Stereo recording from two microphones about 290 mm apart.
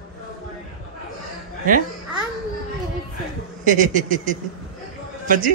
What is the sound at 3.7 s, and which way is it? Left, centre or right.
A man's voice, right.